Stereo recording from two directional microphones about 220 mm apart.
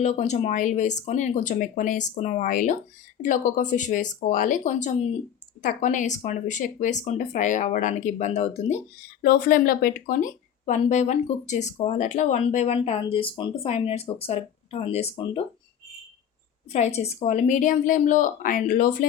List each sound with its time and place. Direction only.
0.0 s speech: 30° left (ahead or behind)
9.2 s speech: 40° left (ahead or behind); by 15.4 s 25° left (ahead or behind)
16.7 s speech: 30° left (ahead or behind)